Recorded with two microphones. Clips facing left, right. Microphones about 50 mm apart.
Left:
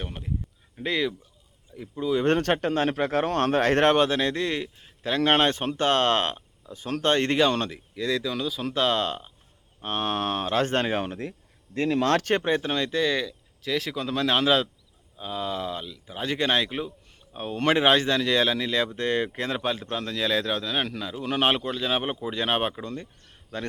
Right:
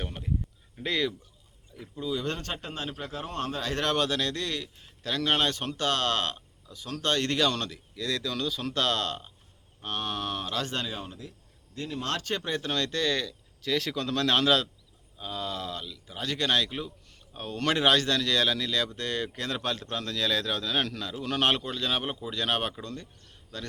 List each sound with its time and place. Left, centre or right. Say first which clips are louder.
0.0 s a sound: left 1 dB; centre
0.8 s speech: left 3 dB; centre
2.0 s speech: left 8 dB; left
2.3 s speech: left 13 dB; left; by 9.3 s centre
9.8 s speech: left 5 dB; left
11.0 s speech: left 10 dB; left
12.4 s speech: left 5 dB; left